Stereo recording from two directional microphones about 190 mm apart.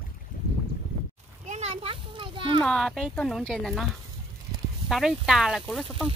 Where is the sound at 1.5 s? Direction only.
35° right (ahead or behind).